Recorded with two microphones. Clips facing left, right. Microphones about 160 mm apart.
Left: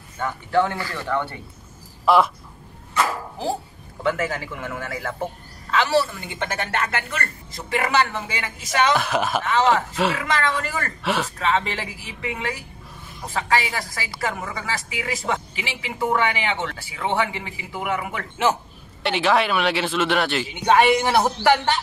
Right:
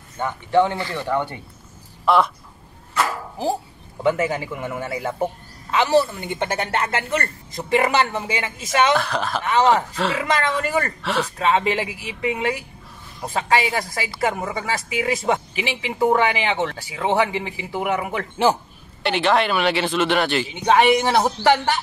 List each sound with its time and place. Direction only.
0.2 s a man's voice: 20° right (ahead or behind)
2.0 s speech: centre (ahead or behind)
4.0 s a man's voice: 20° right (ahead or behind)
8.9 s speech: 5° left (ahead or behind)
9.5 s speech: 20° right (ahead or behind)
11.0 s speech: 5° left (ahead or behind)
11.3 s speech: 20° right (ahead or behind)
19.0 s speech: centre (ahead or behind)
20.6 s a man's voice: 15° right (ahead or behind)